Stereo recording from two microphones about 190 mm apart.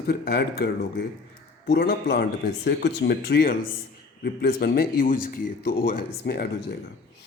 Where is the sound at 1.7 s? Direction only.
55° left (ahead or behind).